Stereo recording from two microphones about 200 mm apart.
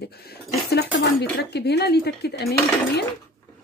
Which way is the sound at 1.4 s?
55° left (ahead or behind).